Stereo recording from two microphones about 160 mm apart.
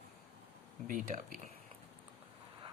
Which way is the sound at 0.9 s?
55° right (ahead or behind).